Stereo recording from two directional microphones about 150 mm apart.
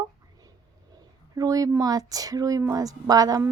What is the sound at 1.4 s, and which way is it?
A woman's voice, 25° right (ahead or behind).